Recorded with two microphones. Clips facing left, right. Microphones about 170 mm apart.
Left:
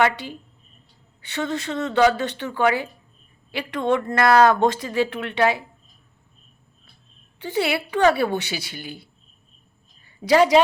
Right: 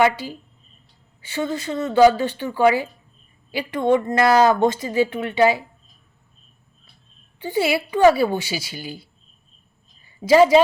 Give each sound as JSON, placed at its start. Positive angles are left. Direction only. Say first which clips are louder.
{"t": 0.0, "sound": "speech", "louder": "right 3 dB", "side_deg": -5}
{"t": 2.1, "sound": "speech", "louder": "right 3 dB", "side_deg": 75}
{"t": 2.5, "sound": "speech", "louder": "right 4 dB", "side_deg": -5}
{"t": 7.3, "sound": "a woman's voice", "louder": "right 2 dB", "side_deg": 80}
{"t": 7.6, "sound": "speech", "louder": "right 4 dB", "side_deg": -5}
{"t": 10.2, "sound": "a woman's voice", "louder": "right 3 dB", "side_deg": -5}